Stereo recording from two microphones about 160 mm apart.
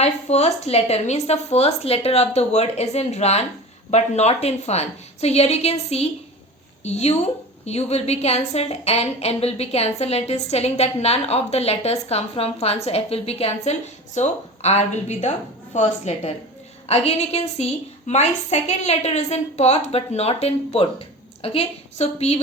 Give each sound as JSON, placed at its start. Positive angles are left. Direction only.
{"t": 0.0, "sound": "a woman's voice", "side_deg": 45}